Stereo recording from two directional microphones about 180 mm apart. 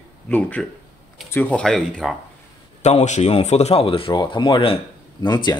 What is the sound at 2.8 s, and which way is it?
Speech, 40° left (ahead or behind).